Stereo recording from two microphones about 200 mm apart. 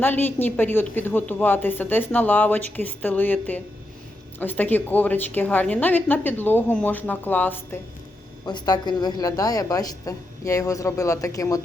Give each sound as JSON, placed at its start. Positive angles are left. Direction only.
{"t": 0.0, "sound": "a woman's voice", "side_deg": 10}
{"t": 8.4, "sound": "a woman's voice", "side_deg": 20}